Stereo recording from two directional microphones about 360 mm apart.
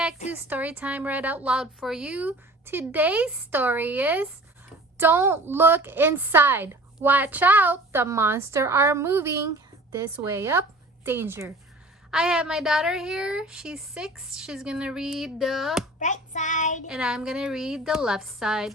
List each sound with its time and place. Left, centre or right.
0.3 s a woman's voice: centre
16.0 s child singing: centre
16.9 s a woman's voice: centre